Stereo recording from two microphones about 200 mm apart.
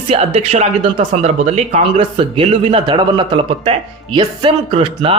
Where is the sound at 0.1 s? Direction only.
30° right (ahead or behind).